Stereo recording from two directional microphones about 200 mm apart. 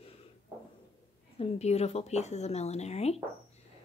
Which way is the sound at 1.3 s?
30° left (ahead or behind).